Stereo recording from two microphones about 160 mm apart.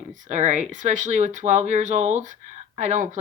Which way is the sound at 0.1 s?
45° right (ahead or behind).